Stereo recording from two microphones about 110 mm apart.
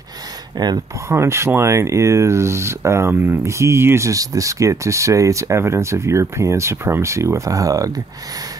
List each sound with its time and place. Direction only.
0.6 s speech: 40° right (ahead or behind)
1.0 s speech: 25° right (ahead or behind)